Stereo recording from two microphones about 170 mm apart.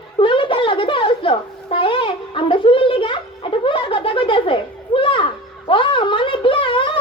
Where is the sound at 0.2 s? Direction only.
30° left (ahead or behind).